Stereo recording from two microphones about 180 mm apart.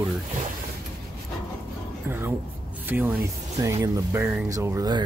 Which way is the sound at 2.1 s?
10° right (ahead or behind).